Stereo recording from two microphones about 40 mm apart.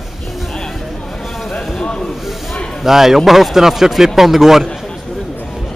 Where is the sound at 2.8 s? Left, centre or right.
Centre.